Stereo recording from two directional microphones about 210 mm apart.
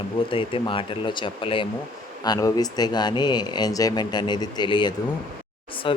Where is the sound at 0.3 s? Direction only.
25° left (ahead or behind).